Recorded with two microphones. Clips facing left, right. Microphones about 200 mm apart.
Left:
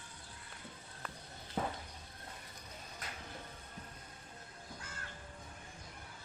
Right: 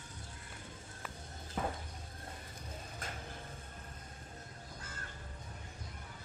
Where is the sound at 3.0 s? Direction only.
45° right (ahead or behind).